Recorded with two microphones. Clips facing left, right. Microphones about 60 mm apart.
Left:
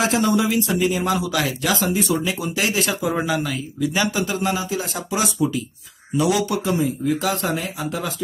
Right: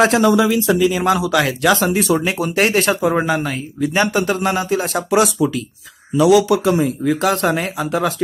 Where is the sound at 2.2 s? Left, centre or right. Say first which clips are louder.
Right 6 dB; right.